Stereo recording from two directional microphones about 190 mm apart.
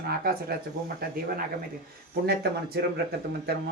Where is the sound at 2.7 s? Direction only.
60° right (ahead or behind).